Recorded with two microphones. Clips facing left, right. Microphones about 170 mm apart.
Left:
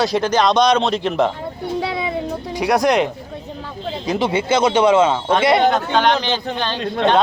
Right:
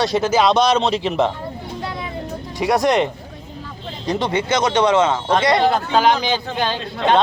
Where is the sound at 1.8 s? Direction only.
75° left (ahead or behind).